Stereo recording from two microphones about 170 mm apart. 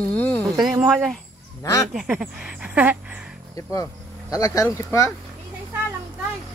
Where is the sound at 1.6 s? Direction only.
20° left (ahead or behind).